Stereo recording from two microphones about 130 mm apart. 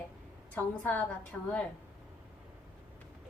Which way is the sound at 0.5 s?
10° left (ahead or behind).